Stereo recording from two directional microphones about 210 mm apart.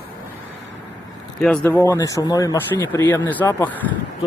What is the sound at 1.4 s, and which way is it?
Speech, 5° left (ahead or behind).